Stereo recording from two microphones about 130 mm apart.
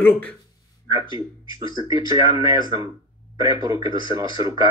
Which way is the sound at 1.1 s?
30° right (ahead or behind).